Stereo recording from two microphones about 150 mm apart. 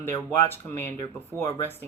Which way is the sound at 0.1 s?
15° left (ahead or behind).